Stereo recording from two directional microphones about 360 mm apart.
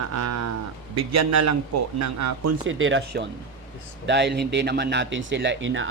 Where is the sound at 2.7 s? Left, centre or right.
Right.